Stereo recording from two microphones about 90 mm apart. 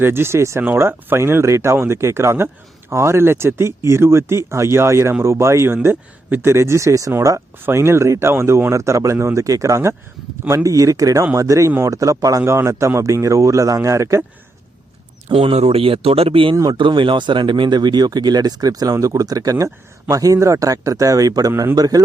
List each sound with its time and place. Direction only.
0.0 s speech: 25° right (ahead or behind)
15.3 s speech: 90° right
16.7 s speech: 65° right (ahead or behind); by 22.0 s 45° right (ahead or behind)